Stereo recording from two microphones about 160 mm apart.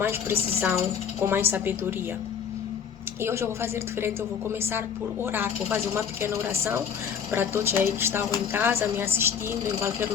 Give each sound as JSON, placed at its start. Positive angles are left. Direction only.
{"t": 0.0, "sound": "speech", "side_deg": -15}
{"t": 3.2, "sound": "speech", "side_deg": -15}
{"t": 5.2, "sound": "speech", "side_deg": -10}